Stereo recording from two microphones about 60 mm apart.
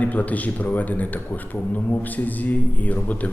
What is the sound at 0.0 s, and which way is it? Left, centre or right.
Speech, left.